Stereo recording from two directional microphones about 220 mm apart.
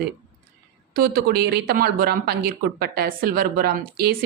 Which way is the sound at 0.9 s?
40° right (ahead or behind).